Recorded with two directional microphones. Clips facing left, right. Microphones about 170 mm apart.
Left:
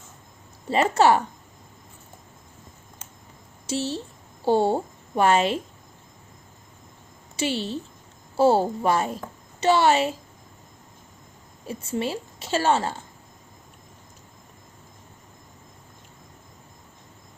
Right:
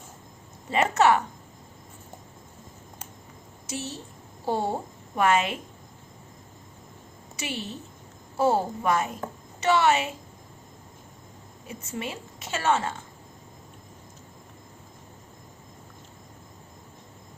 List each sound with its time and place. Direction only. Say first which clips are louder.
0.7 s a woman's voice: left 2 dB; 30° left (ahead or behind)
3.7 s a woman's voice: left 7 dB; 30° left (ahead or behind)
7.3 s a woman's voice: left 8 dB; 30° left (ahead or behind)
11.7 s a woman's voice: left 7 dB; 30° left (ahead or behind)